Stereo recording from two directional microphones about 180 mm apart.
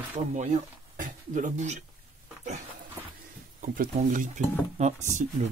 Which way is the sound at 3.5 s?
45° right (ahead or behind).